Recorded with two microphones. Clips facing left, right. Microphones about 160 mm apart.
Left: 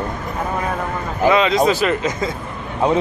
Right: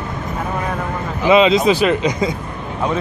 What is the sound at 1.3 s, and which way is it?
Speech, 20° right (ahead or behind).